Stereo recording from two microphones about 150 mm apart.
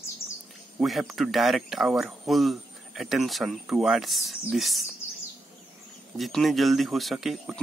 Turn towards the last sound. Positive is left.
turn(degrees=0)  # may be behind; listen again after turning